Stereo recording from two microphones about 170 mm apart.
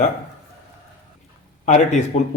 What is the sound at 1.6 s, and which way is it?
Speech, 45° left (ahead or behind).